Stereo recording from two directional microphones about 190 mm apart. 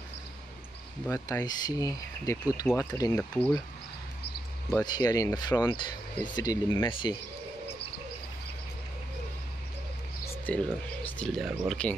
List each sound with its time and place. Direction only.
1.0 s speech: 15° left (ahead or behind)
4.8 s speech: 20° left (ahead or behind)
10.5 s speech: 5° left (ahead or behind)